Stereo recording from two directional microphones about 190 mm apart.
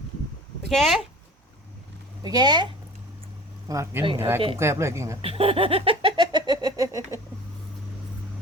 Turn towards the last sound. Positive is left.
turn(degrees=-20)  # may be behind; listen again after turning